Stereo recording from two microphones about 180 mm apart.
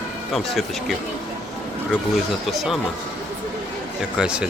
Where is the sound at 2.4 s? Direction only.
Centre (ahead or behind).